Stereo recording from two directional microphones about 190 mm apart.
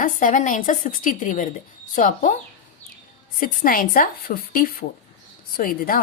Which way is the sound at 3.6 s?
45° left (ahead or behind).